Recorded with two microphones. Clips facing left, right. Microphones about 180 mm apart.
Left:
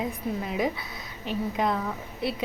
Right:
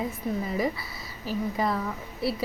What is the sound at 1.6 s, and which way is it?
Speech, centre (ahead or behind).